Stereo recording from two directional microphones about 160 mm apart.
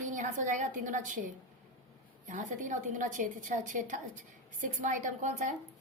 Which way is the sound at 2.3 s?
50° right (ahead or behind).